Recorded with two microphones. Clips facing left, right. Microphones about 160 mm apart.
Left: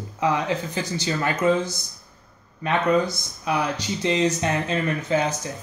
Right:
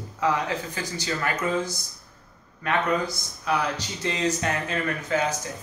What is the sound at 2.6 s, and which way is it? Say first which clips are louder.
Speech: left 4 dB; 20° left (ahead or behind).